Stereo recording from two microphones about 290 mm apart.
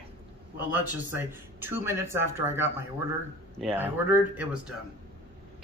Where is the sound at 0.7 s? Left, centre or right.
Centre.